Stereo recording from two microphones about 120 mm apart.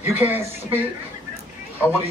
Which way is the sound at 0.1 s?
15° right (ahead or behind).